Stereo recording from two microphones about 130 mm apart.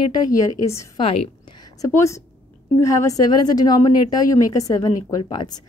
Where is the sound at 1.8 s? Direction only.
25° left (ahead or behind).